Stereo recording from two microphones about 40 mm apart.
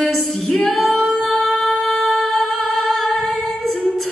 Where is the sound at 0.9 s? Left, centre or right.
Centre.